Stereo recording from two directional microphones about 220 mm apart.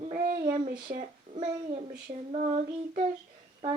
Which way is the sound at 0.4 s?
20° right (ahead or behind).